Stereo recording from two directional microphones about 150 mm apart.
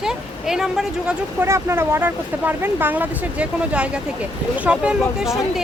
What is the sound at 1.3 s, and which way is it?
Speech, 20° right (ahead or behind).